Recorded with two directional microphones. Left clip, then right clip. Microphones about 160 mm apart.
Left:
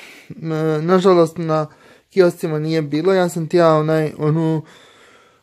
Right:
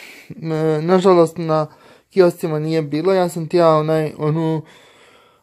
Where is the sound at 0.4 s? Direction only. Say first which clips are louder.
Right 1 dB; 10° left (ahead or behind).